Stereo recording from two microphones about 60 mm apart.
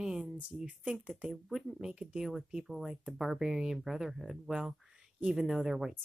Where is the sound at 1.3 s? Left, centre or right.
Centre.